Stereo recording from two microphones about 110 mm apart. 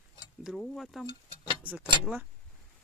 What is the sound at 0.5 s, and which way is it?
Speech, 5° left (ahead or behind).